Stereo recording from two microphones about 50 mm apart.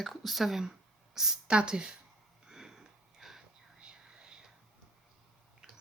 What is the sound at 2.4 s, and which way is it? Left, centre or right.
Sniff, centre.